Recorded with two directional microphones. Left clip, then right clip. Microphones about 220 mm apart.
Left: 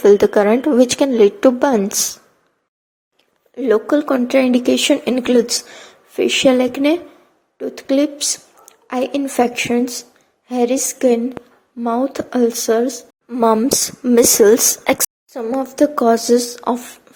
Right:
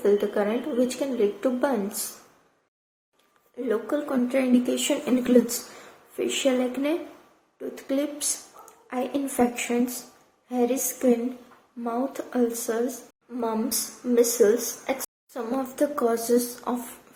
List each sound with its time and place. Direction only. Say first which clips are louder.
0.0 s speech: left 12 dB; 45° left (ahead or behind)
3.5 s a woman's voice: left 12 dB; 35° left (ahead or behind)
15.3 s speech: left 7 dB; 25° left (ahead or behind)